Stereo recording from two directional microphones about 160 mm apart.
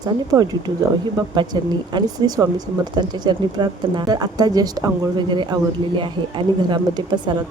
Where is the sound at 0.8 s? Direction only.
25° right (ahead or behind).